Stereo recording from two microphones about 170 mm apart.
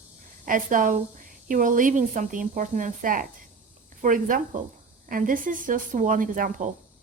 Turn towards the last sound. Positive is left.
turn(degrees=-50)  # may be behind; listen again after turning